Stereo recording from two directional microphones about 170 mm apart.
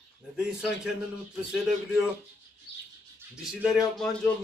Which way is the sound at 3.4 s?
Centre (ahead or behind).